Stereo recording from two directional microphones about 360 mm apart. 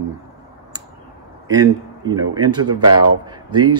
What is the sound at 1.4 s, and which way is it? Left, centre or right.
Speech, centre.